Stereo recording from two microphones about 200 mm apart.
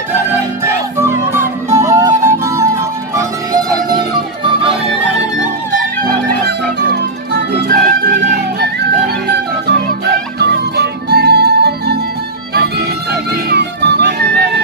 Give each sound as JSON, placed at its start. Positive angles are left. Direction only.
{"t": 1.0, "sound": "music", "side_deg": -15}
{"t": 6.0, "sound": "music", "side_deg": -55}
{"t": 9.7, "sound": "music", "side_deg": -55}